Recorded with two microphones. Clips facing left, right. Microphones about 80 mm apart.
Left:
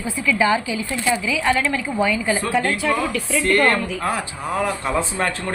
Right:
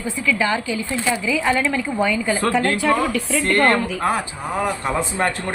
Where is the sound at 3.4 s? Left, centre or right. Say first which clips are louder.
Even; right.